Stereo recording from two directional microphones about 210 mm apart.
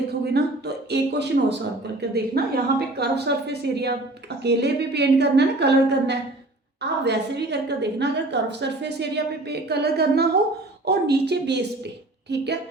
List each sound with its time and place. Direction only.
0.1 s a woman's voice: 50° right (ahead or behind)